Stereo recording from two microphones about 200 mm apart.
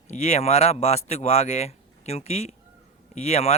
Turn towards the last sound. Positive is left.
turn(degrees=30)  # may be behind; listen again after turning